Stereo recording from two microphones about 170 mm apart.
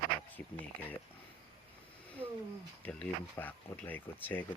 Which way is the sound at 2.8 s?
10° left (ahead or behind).